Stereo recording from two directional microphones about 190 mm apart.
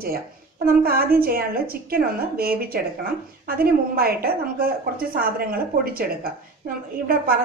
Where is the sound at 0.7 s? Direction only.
50° right (ahead or behind).